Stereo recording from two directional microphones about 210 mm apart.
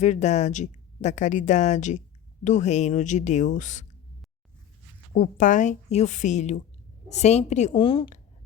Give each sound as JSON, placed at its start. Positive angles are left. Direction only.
{"t": 0.0, "sound": "a woman's voice", "side_deg": 35}
{"t": 5.1, "sound": "a woman's voice", "side_deg": 40}